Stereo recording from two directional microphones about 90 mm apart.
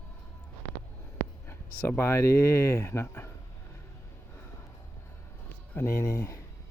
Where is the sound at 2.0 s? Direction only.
30° left (ahead or behind).